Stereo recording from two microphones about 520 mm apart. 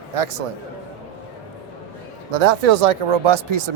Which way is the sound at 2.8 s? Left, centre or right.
Right.